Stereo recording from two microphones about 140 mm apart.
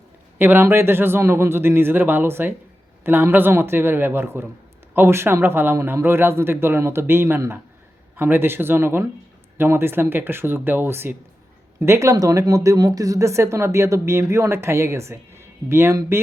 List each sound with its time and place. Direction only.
0.3 s a man's voice: 15° right (ahead or behind)